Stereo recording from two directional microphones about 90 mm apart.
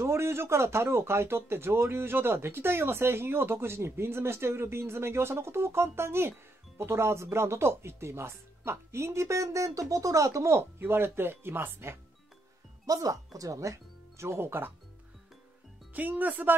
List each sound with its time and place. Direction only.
0.0 s speech: 30° right (ahead or behind)
12.8 s speech: 40° right (ahead or behind); by 14.7 s 25° right (ahead or behind)
15.9 s speech: 20° right (ahead or behind)